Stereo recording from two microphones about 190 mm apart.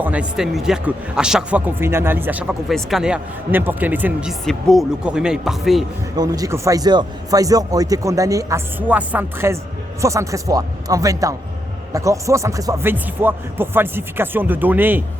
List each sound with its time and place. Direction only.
0.0 s a man's voice: 5° right (ahead or behind)
6.1 s a man's voice: 20° right (ahead or behind)